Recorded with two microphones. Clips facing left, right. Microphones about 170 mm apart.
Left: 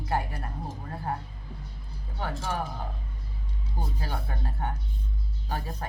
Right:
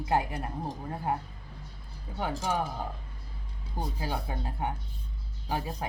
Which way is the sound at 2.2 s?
15° right (ahead or behind).